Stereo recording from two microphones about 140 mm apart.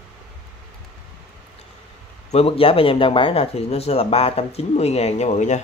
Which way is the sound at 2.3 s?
45° left (ahead or behind).